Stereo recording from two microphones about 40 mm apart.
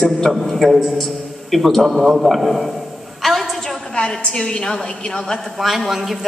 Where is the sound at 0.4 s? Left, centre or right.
Centre.